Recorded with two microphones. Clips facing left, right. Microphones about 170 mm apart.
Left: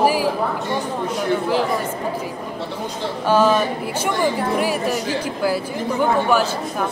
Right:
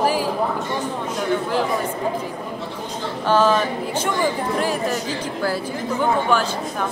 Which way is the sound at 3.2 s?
10° left (ahead or behind).